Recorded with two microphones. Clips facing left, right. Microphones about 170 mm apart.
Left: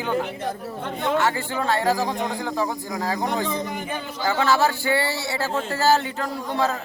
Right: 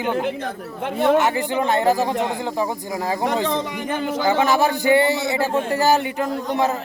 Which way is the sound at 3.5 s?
80° right.